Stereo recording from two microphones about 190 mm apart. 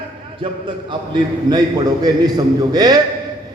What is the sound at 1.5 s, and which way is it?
Speech, 20° right (ahead or behind).